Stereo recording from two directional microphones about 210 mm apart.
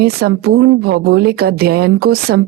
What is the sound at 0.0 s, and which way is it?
A woman's voice, 50° right (ahead or behind).